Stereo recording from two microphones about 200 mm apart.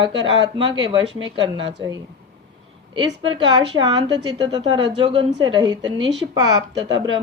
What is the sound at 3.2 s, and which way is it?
A woman's voice, 25° right (ahead or behind).